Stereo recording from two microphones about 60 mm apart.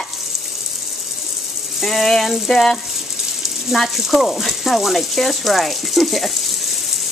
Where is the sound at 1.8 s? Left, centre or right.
Centre.